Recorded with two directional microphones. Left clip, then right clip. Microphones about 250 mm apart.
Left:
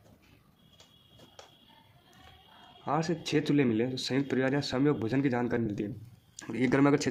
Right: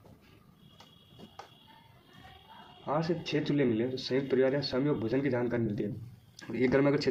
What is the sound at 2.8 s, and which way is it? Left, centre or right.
Speech, left.